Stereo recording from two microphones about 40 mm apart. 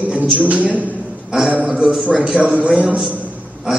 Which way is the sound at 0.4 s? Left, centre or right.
Right.